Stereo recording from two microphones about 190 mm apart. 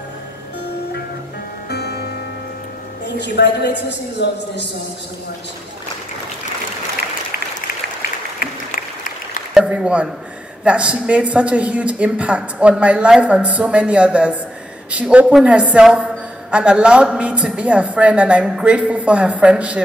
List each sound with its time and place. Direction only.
1.7 s music: 60° left (ahead or behind)
3.1 s a woman's voice: 65° left (ahead or behind)
8.4 s applause: 45° left (ahead or behind)
9.5 s a sound: 5° right (ahead or behind)
10.6 s a woman's voice: 5° right (ahead or behind)